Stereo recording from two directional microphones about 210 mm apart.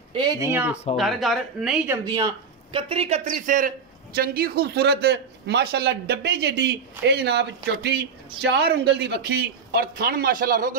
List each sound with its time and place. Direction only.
0.1 s speech: 20° right (ahead or behind); by 2.0 s 5° right (ahead or behind)
2.0 s speech: 20° right (ahead or behind)
3.3 s a man's voice: 40° right (ahead or behind)